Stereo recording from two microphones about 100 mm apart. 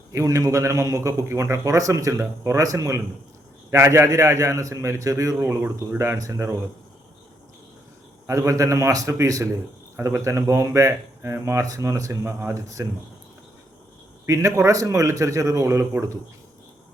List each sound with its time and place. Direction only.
0.1 s a man's voice: 30° right (ahead or behind)
8.3 s a man's voice: 30° right (ahead or behind)
14.3 s a man's voice: 30° right (ahead or behind)